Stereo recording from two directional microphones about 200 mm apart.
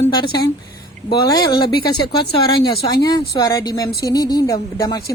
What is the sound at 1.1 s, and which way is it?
Speech, 20° left (ahead or behind).